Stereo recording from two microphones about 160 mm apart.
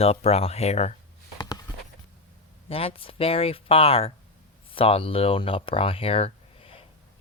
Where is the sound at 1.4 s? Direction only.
25° left (ahead or behind).